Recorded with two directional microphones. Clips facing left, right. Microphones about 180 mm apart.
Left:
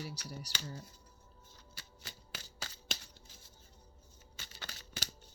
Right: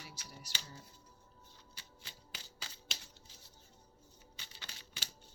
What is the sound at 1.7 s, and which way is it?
Scissors, 45° left (ahead or behind).